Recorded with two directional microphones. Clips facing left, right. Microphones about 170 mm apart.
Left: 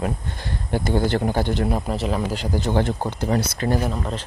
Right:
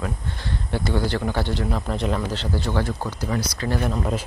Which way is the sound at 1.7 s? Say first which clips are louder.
Left 1 dB; 5° left (ahead or behind).